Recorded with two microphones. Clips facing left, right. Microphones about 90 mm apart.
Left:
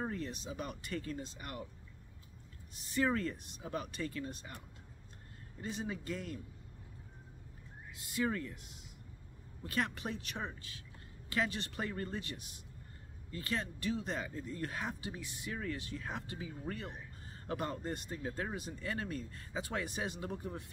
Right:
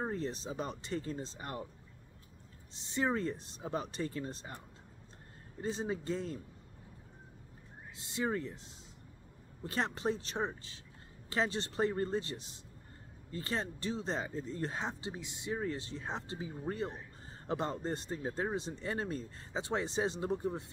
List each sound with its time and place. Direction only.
0.0 s speech: 30° right (ahead or behind)
2.7 s speech: 25° right (ahead or behind)
5.6 s speech: 30° right (ahead or behind)
7.9 s speech: 25° right (ahead or behind)